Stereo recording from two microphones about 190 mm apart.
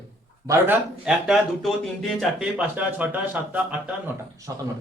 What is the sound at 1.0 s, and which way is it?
Speech, centre (ahead or behind).